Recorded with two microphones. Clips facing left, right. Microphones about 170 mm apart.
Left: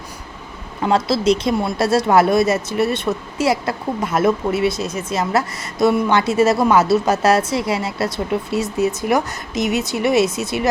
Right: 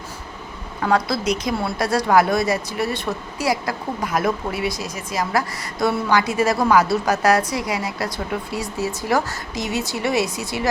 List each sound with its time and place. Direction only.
0.8 s speech: 25° left (ahead or behind)